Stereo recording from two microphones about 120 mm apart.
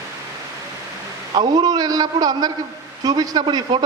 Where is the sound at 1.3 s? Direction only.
35° right (ahead or behind).